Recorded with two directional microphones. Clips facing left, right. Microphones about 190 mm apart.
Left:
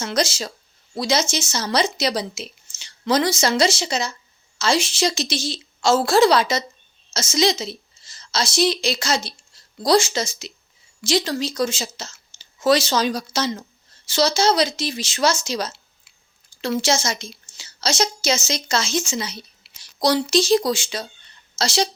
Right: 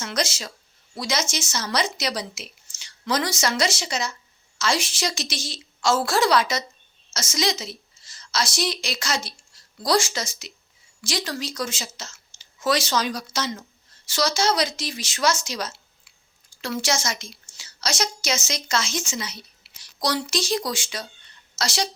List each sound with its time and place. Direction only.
0.0 s a woman's voice: 30° left (ahead or behind)